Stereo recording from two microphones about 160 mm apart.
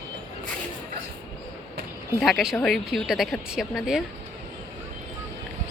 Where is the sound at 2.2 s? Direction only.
Centre (ahead or behind).